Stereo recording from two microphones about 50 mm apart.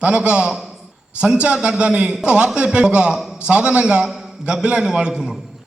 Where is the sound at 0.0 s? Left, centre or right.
Right.